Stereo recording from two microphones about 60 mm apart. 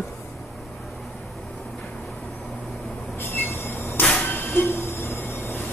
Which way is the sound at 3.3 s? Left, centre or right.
Left.